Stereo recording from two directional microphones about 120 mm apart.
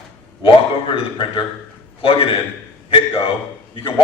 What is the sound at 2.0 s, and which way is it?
Speech, 50° left (ahead or behind).